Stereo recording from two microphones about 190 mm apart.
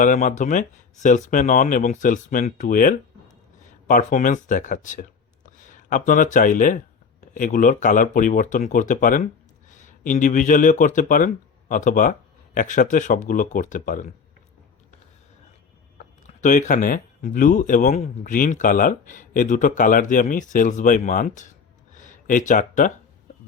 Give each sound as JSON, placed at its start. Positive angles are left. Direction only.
{"t": 0.0, "sound": "speech", "side_deg": 45}
{"t": 16.2, "sound": "speech", "side_deg": 40}
{"t": 21.9, "sound": "a sound", "side_deg": 40}